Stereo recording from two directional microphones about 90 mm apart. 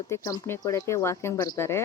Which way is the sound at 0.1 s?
30° left (ahead or behind).